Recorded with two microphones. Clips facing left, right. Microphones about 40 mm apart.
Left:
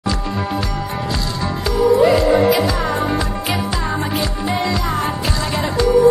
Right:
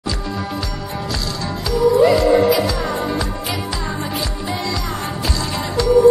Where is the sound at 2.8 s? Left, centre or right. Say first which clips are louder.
Left 2 dB; centre.